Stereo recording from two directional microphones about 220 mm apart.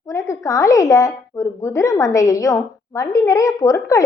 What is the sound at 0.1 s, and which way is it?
Speech, 15° left (ahead or behind).